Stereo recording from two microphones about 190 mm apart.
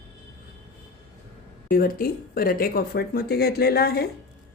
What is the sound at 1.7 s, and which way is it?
Speech, 50° left (ahead or behind).